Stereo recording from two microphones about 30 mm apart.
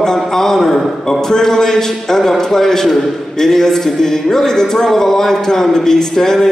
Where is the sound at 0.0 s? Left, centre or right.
Centre.